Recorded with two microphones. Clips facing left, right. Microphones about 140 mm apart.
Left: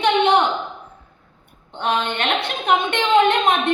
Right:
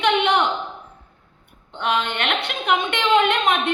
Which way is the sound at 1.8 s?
30° left (ahead or behind).